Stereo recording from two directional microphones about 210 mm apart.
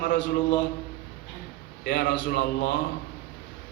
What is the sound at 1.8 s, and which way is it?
Speech, 55° left (ahead or behind).